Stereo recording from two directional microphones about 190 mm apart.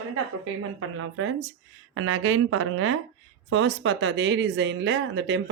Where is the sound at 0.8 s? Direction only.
90° right.